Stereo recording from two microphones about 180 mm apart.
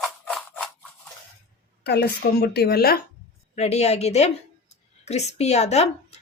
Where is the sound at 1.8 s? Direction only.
60° left (ahead or behind).